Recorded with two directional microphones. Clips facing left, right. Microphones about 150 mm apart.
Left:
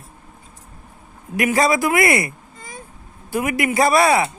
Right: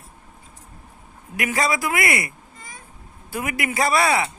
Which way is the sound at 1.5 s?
25° left (ahead or behind).